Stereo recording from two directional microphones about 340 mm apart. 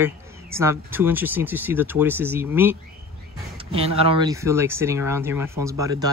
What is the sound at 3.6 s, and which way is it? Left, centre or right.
Speech, centre.